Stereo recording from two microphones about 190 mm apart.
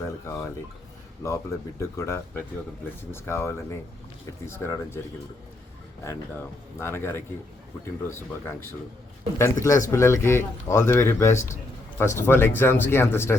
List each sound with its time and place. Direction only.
0.0 s speech: 15° left (ahead or behind)
6.7 s speech: 10° left (ahead or behind)